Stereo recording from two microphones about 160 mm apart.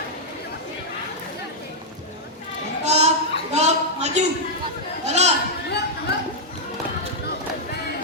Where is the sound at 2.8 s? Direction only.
45° right (ahead or behind).